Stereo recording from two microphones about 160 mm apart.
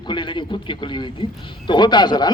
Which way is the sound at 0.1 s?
30° left (ahead or behind).